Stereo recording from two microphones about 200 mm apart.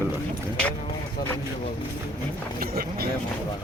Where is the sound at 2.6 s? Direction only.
50° right (ahead or behind).